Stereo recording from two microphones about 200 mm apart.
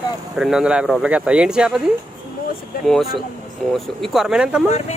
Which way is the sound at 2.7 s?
45° left (ahead or behind).